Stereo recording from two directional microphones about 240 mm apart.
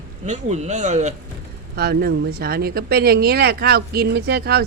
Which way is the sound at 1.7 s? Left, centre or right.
Right.